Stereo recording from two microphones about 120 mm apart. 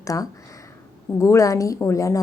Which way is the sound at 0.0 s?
30° left (ahead or behind).